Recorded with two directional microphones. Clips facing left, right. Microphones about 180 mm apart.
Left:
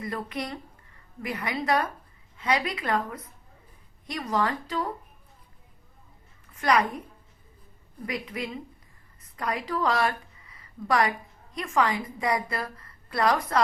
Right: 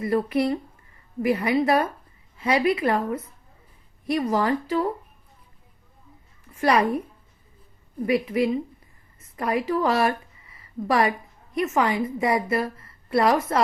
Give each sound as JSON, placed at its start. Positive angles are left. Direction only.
{"t": 0.0, "sound": "a woman's voice", "side_deg": -25}
{"t": 6.5, "sound": "a woman's voice", "side_deg": -25}
{"t": 8.0, "sound": "a woman's voice", "side_deg": -25}